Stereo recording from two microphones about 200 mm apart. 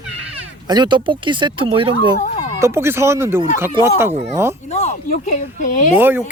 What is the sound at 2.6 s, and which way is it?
Speech, 15° right (ahead or behind).